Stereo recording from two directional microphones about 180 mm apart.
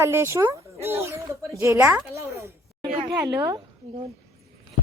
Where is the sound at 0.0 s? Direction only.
15° right (ahead or behind).